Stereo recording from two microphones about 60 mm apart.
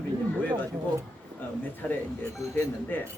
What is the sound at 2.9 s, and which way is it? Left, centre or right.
Speech, left.